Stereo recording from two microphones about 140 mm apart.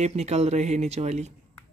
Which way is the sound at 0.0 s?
50° right (ahead or behind).